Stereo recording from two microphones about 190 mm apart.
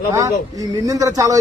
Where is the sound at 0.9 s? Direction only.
20° right (ahead or behind).